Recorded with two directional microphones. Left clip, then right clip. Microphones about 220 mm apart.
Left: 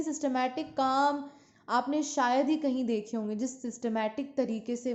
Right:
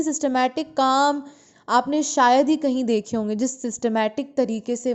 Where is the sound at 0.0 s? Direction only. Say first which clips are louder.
Right 9 dB; 40° right (ahead or behind).